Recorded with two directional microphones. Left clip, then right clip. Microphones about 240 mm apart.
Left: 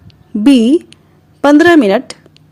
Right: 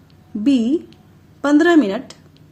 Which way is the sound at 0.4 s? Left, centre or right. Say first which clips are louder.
Left 9 dB; left.